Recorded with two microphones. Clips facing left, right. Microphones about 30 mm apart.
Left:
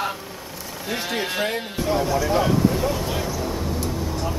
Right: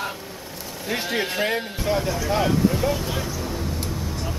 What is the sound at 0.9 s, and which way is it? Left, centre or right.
Speech, centre.